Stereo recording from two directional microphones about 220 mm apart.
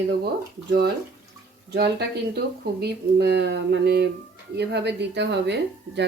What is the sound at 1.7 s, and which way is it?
A woman's voice, 45° right (ahead or behind).